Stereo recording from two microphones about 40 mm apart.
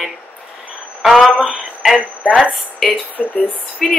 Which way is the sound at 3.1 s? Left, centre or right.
Left.